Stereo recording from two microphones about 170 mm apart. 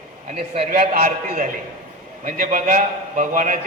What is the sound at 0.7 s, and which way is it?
A man's voice, 60° right (ahead or behind).